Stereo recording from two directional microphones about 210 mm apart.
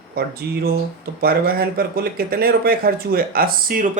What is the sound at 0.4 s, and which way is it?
Speech, 50° right (ahead or behind).